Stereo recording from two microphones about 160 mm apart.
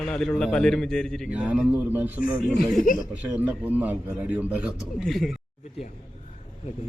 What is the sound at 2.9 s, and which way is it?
Speech, 55° left (ahead or behind).